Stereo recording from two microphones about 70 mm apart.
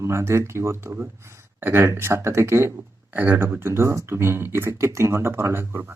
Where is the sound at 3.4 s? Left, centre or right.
Right.